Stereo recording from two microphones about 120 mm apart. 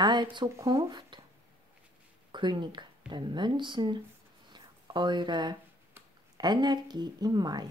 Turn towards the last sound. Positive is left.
turn(degrees=-35)  # may be behind; listen again after turning